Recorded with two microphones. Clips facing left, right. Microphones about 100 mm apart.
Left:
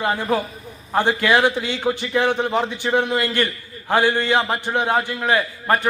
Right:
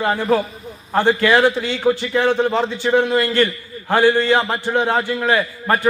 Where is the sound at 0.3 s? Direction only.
20° left (ahead or behind).